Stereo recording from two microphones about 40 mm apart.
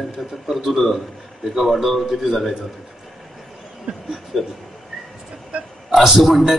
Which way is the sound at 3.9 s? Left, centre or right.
Right.